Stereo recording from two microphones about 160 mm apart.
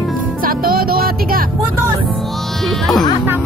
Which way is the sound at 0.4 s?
65° right (ahead or behind).